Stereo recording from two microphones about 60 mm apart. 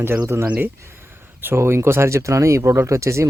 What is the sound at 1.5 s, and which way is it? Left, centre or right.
Speech, right.